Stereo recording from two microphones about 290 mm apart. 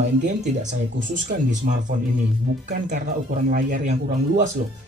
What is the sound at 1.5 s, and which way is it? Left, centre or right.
Speech, right.